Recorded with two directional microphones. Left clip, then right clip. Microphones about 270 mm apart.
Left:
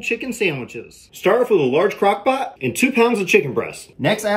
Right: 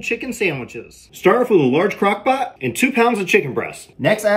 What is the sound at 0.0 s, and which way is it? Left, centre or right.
Speech, centre.